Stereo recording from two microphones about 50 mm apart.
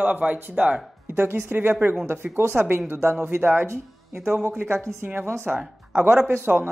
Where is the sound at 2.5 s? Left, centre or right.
Right.